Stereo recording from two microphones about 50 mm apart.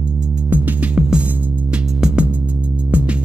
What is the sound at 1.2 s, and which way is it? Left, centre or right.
Music, right.